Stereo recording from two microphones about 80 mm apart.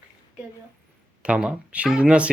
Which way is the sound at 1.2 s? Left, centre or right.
Centre.